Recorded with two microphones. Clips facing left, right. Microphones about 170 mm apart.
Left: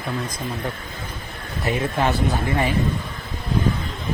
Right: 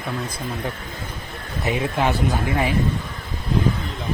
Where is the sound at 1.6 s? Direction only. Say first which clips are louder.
Even; 10° right (ahead or behind).